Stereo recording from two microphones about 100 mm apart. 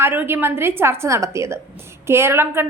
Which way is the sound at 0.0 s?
20° right (ahead or behind).